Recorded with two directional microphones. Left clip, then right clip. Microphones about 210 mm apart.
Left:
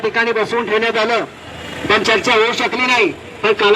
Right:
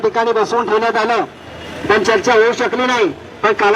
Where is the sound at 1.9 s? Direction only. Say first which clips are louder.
Right 1 dB; 40° right (ahead or behind).